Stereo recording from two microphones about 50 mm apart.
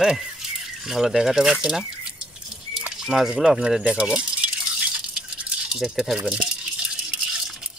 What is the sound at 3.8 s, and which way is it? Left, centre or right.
Rattle, centre.